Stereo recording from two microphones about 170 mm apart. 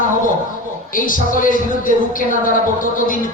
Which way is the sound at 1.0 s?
55° left (ahead or behind).